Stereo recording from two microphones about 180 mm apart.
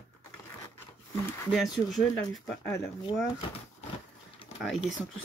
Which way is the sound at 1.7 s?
Centre (ahead or behind).